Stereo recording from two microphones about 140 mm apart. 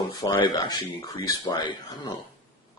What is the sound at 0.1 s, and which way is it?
Speech, 30° left (ahead or behind).